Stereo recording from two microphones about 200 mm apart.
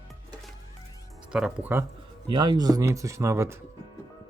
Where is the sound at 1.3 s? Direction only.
5° right (ahead or behind).